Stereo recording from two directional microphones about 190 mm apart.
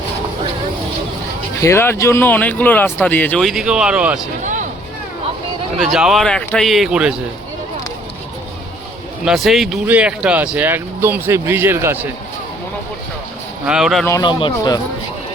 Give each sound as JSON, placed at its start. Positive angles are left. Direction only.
{"t": 1.6, "sound": "speech", "side_deg": 10}
{"t": 5.8, "sound": "speech", "side_deg": 0}
{"t": 9.2, "sound": "speech", "side_deg": 0}
{"t": 13.7, "sound": "speech", "side_deg": 0}
{"t": 14.0, "sound": "a man's voice", "side_deg": 15}